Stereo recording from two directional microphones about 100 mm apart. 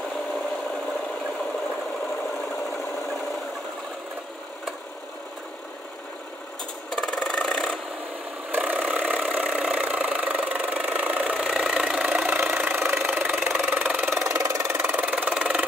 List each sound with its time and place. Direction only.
6.9 s wood: 5° left (ahead or behind)
8.5 s engine: 15° right (ahead or behind)
12.6 s engine: 20° right (ahead or behind)
13.7 s a sound: 20° right (ahead or behind)
14.2 s engine: 30° right (ahead or behind); by 15.6 s 10° right (ahead or behind)